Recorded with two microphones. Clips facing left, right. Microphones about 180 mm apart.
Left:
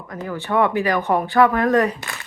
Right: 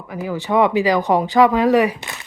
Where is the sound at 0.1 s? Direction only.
10° right (ahead or behind).